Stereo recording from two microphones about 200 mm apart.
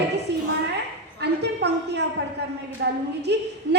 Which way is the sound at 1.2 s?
55° right (ahead or behind).